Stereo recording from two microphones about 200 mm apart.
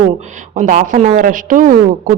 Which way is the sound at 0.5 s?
40° right (ahead or behind).